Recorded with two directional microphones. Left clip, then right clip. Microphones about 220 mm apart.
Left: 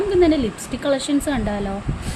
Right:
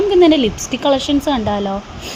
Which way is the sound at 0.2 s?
20° right (ahead or behind).